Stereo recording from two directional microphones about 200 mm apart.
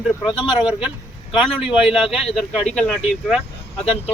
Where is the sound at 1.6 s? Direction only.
25° left (ahead or behind).